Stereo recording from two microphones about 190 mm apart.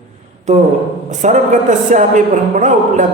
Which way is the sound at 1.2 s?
40° right (ahead or behind).